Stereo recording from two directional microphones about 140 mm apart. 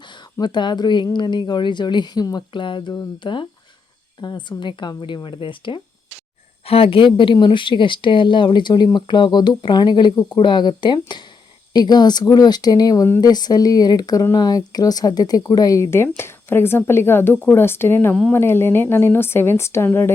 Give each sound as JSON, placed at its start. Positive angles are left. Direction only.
{"t": 0.3, "sound": "speech", "side_deg": 30}